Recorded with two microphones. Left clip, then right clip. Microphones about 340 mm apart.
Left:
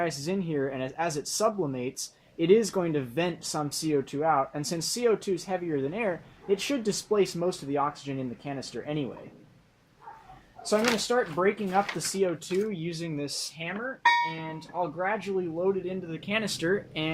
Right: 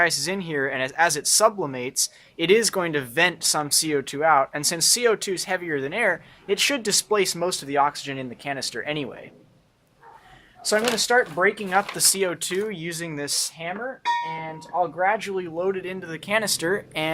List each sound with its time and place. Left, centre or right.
0.0 s speech: right
10.9 s speech: right
14.8 s speech: right